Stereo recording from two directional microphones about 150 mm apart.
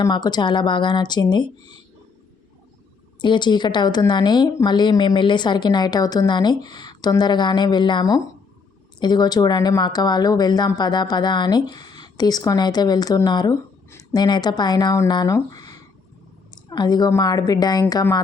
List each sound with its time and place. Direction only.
0.0 s speech: 25° left (ahead or behind)
3.2 s speech: 30° left (ahead or behind)